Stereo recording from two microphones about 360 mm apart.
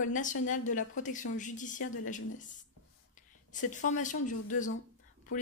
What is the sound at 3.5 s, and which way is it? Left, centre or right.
Speech, left.